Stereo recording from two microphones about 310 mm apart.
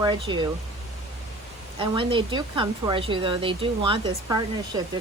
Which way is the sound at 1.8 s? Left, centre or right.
Centre.